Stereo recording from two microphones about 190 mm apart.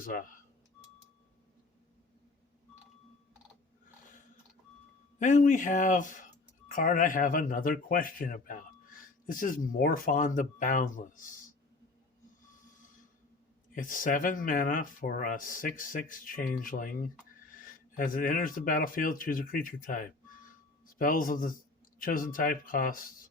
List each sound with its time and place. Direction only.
0.0 s a man's voice: 45° left (ahead or behind)
5.2 s a man's voice: 40° left (ahead or behind)
13.7 s a man's voice: 45° left (ahead or behind)